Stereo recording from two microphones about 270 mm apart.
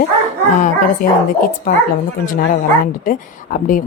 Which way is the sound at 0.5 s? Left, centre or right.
Left.